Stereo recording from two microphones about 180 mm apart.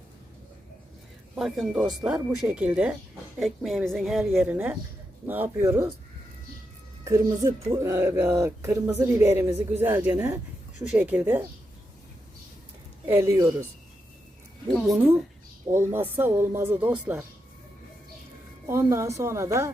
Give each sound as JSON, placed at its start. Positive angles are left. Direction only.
{"t": 1.4, "sound": "a woman's voice", "side_deg": 0}
{"t": 7.0, "sound": "speech", "side_deg": -20}
{"t": 13.1, "sound": "speech", "side_deg": -15}
{"t": 15.7, "sound": "speech", "side_deg": -15}
{"t": 18.7, "sound": "speech", "side_deg": -15}